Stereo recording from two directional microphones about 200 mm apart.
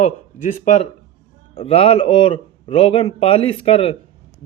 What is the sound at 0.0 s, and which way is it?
Speech, 40° left (ahead or behind).